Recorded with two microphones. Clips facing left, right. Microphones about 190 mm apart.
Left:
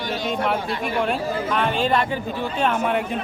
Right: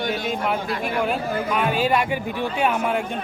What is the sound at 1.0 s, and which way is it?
A man's voice, 5° right (ahead or behind).